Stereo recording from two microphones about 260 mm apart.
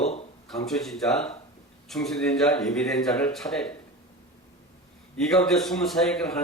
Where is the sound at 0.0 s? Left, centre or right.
Left.